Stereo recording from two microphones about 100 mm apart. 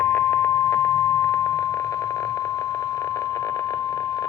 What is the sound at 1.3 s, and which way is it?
Alarm clock, 30° left (ahead or behind).